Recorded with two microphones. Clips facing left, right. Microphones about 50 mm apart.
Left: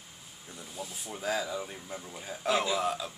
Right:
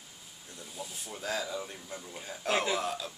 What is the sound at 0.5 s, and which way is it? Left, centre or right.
Speech, centre.